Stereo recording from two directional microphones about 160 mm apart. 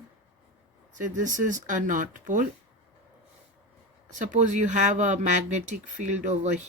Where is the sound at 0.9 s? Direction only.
55° right (ahead or behind).